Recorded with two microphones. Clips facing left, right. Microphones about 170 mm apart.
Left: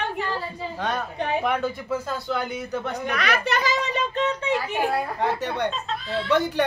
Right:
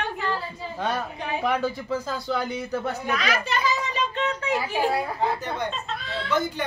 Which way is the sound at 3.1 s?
65° left (ahead or behind).